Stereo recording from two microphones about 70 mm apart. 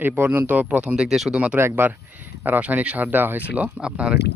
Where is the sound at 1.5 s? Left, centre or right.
Right; by 4.2 s centre.